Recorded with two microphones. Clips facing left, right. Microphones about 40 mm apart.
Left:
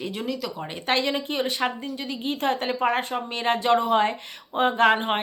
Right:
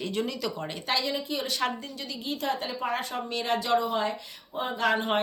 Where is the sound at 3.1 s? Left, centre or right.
Left.